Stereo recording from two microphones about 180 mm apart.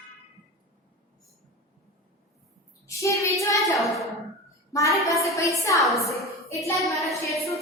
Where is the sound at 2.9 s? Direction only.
15° left (ahead or behind).